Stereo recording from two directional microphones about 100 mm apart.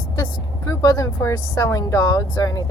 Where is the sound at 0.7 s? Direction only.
35° left (ahead or behind).